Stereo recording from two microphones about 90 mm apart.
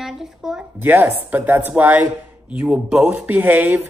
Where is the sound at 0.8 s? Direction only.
20° right (ahead or behind).